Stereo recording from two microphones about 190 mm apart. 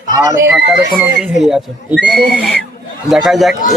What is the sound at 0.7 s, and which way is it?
Speech, 5° right (ahead or behind).